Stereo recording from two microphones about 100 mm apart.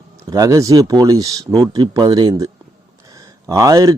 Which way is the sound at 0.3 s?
35° right (ahead or behind).